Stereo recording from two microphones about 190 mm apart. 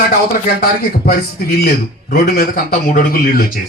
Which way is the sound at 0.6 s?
55° left (ahead or behind).